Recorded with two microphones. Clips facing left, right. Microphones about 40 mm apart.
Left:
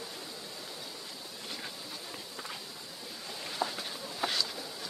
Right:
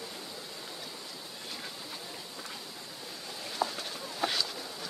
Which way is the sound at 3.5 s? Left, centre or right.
Centre.